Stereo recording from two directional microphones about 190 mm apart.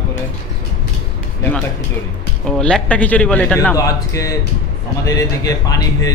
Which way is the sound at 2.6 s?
5° left (ahead or behind).